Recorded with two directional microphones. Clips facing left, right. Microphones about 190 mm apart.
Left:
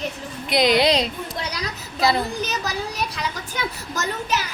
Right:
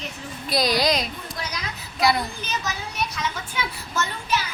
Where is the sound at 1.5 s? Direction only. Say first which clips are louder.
Left 2 dB; 35° left (ahead or behind).